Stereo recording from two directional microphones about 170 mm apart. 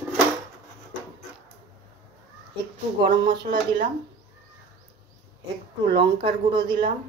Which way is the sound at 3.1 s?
25° right (ahead or behind).